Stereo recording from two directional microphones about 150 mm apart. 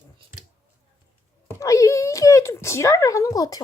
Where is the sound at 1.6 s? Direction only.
20° left (ahead or behind).